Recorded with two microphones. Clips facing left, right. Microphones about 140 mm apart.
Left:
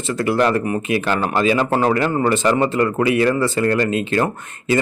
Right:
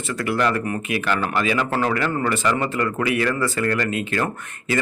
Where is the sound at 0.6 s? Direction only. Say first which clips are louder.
Left 5 dB; 20° left (ahead or behind).